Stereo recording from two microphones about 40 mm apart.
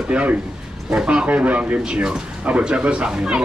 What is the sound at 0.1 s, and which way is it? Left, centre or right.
Speech, right.